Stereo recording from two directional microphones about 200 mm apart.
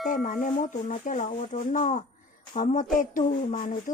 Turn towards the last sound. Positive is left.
turn(degrees=40)  # may be behind; listen again after turning